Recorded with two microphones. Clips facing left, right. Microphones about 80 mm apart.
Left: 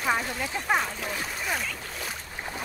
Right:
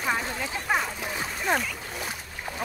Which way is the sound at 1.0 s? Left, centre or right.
Centre.